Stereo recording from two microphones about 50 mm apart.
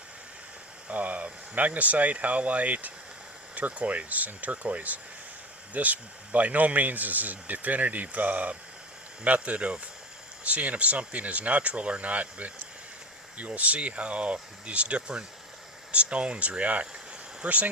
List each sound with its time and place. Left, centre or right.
0.9 s speech: right